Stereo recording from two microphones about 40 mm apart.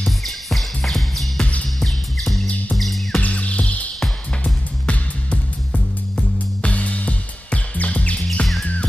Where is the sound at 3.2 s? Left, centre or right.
Left.